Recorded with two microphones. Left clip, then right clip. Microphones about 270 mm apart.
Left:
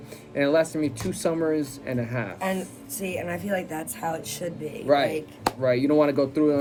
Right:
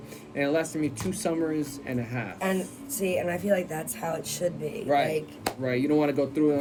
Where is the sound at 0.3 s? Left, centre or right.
Centre.